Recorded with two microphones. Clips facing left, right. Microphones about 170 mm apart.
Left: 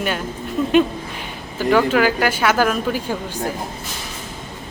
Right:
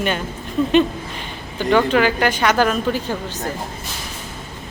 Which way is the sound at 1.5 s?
5° left (ahead or behind).